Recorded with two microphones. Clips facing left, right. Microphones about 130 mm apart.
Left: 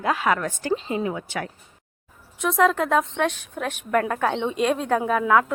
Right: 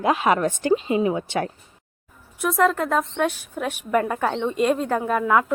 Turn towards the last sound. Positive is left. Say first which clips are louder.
# even
turn(degrees=-5)  # may be behind; listen again after turning